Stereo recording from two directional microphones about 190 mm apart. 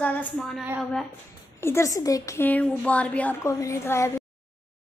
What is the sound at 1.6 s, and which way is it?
A woman's voice, 15° left (ahead or behind).